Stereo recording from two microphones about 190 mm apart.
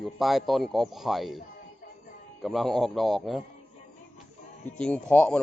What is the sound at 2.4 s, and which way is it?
Speech, centre (ahead or behind).